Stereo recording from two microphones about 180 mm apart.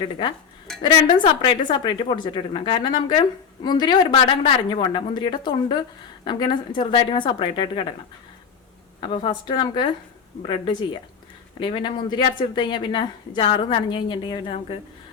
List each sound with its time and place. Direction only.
0.8 s speech: 25° left (ahead or behind)
9.0 s speech: 30° left (ahead or behind)